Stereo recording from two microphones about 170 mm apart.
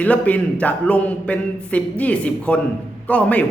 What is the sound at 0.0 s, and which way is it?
A man's voice, 10° left (ahead or behind).